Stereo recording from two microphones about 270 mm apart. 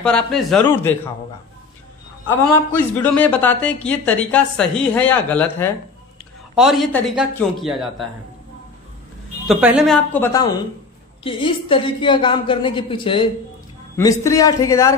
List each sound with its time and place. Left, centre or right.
0.0 s speech: centre
2.2 s speech: centre
9.5 s a woman's voice: centre